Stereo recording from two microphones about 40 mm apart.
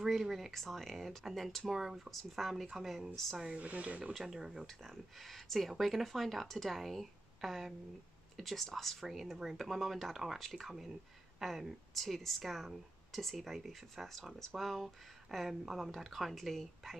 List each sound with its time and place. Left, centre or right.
0.0 s speech: centre
0.5 s speech: centre
1.7 s speech: centre
3.5 s speech: right
4.2 s speech: centre
4.8 s speech: centre